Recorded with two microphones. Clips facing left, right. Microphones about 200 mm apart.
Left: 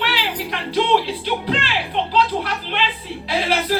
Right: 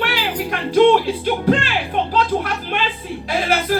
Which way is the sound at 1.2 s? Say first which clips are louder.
Right 5 dB; 50° right (ahead or behind).